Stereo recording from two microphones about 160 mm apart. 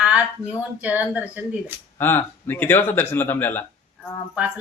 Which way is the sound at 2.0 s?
15° left (ahead or behind).